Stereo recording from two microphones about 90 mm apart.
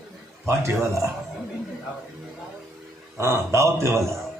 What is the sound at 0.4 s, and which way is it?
Speech, 30° right (ahead or behind).